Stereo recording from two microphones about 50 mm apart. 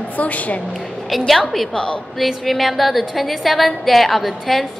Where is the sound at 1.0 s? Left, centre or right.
Centre.